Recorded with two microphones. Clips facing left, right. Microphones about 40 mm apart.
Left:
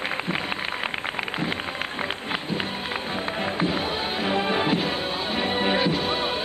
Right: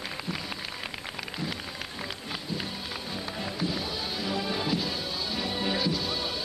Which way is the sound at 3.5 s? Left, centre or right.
Left.